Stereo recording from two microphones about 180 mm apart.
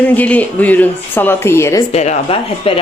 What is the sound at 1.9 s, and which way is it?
Speech, 40° left (ahead or behind).